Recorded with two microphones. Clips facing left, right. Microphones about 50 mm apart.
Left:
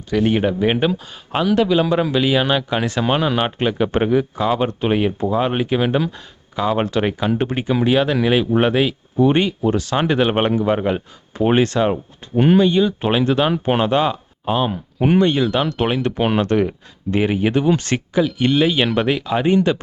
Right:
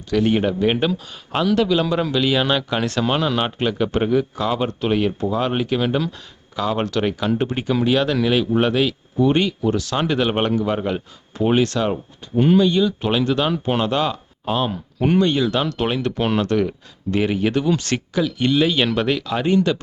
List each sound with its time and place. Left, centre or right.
0.1 s speech: centre